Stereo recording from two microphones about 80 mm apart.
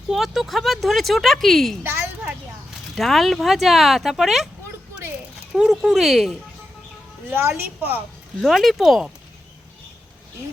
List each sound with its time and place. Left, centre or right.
0.1 s speech: centre
1.8 s a sound: right
2.9 s speech: centre
5.5 s speech: centre
7.3 s a woman's voice: right
8.4 s speech: centre